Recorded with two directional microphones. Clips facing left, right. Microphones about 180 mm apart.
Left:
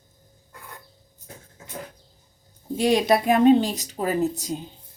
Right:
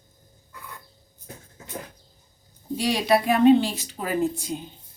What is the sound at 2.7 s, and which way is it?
A woman's voice, 50° left (ahead or behind).